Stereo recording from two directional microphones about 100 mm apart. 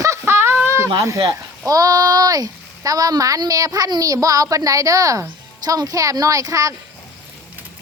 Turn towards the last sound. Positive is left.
turn(degrees=-35)  # may be behind; listen again after turning